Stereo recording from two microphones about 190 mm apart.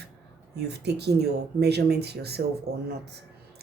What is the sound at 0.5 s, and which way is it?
Speech, 60° right (ahead or behind).